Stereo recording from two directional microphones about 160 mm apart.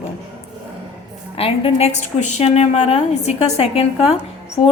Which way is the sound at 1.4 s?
35° left (ahead or behind).